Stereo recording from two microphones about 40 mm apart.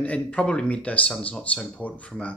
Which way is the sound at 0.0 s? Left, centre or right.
Left.